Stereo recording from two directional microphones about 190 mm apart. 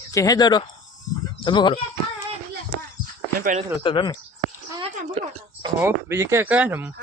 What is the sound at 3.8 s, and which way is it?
Speech, 25° left (ahead or behind).